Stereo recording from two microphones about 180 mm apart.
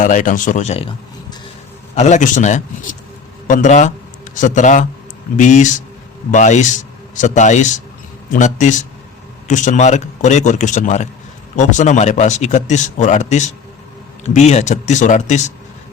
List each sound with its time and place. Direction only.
0.0 s speech: 45° left (ahead or behind); by 1.4 s 30° left (ahead or behind)
2.0 s a man's voice: 40° left (ahead or behind)